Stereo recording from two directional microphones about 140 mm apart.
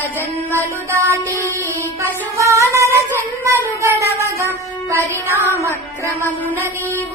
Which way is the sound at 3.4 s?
20° right (ahead or behind).